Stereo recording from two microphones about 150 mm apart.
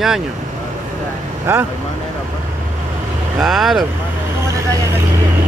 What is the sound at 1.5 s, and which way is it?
Speech, 15° right (ahead or behind).